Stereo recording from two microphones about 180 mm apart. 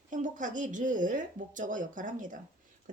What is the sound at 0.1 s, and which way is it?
Speech, 45° right (ahead or behind).